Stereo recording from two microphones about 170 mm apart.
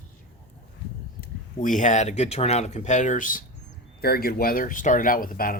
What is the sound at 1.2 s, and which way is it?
Speech, 50° left (ahead or behind).